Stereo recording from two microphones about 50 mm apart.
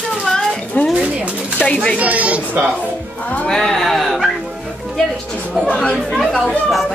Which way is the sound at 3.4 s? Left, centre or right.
Centre.